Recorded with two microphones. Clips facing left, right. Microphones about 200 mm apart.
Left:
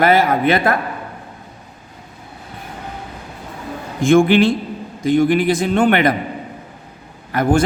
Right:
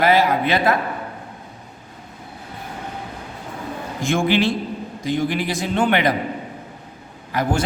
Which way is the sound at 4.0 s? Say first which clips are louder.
Left 7 dB; 55° left (ahead or behind).